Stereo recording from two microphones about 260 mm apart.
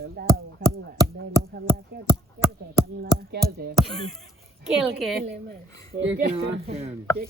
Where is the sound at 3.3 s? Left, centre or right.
Right.